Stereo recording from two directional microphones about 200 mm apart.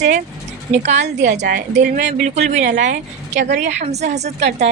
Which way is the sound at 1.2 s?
60° right (ahead or behind).